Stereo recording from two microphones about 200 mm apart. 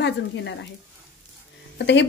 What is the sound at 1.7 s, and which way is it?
Speech, 60° left (ahead or behind).